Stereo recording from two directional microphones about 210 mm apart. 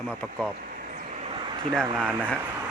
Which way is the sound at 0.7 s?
40° right (ahead or behind).